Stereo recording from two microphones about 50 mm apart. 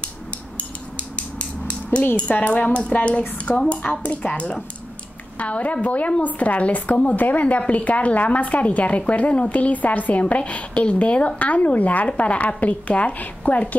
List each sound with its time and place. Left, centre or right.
2.3 s a woman's voice: left